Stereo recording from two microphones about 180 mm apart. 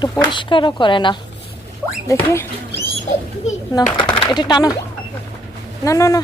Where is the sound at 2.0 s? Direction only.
15° left (ahead or behind).